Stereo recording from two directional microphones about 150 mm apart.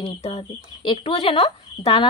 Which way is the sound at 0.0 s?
40° left (ahead or behind).